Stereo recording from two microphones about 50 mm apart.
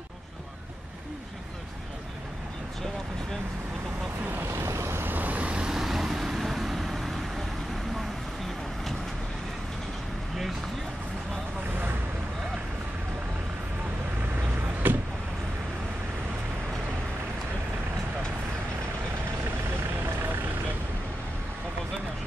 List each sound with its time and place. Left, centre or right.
4.6 s vehicle: right
5.0 s vehicle: right
5.4 s vehicle: centre
14.8 s vehicle: right